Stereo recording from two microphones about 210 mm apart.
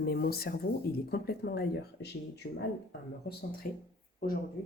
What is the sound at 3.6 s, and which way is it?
Speech, 40° left (ahead or behind).